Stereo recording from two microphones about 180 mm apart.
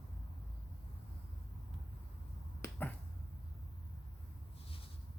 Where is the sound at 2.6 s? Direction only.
10° left (ahead or behind).